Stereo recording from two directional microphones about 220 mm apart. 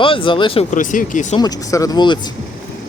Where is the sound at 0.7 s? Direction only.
35° left (ahead or behind).